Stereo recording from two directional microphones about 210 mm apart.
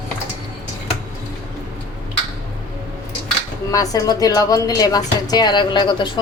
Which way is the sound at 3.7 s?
15° left (ahead or behind).